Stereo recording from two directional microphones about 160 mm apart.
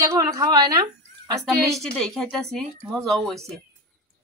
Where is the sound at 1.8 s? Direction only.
5° left (ahead or behind).